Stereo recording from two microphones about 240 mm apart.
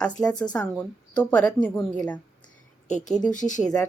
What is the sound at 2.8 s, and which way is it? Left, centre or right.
Speech, left.